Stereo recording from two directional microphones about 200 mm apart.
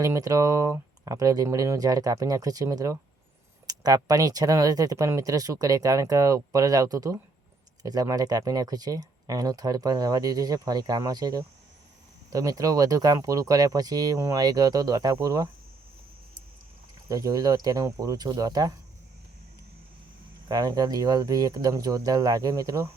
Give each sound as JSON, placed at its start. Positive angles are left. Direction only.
{"t": 0.0, "sound": "speech", "side_deg": -15}
{"t": 17.1, "sound": "speech", "side_deg": -15}
{"t": 20.5, "sound": "speech", "side_deg": -20}